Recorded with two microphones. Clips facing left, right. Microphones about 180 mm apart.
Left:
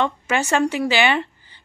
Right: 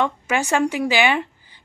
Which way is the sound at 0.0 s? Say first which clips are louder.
Even; 10° right (ahead or behind).